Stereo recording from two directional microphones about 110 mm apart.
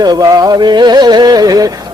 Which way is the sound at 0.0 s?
35° right (ahead or behind).